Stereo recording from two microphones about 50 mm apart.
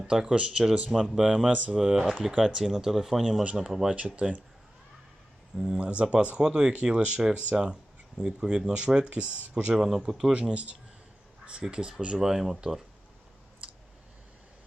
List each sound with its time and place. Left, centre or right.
0.0 s speech: centre
3.4 s speech: right
5.5 s speech: centre
9.7 s speech: centre
10.3 s speech: right
11.7 s speech: centre